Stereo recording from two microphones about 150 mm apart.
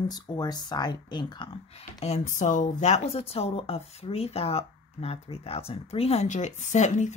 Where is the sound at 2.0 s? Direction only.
50° left (ahead or behind).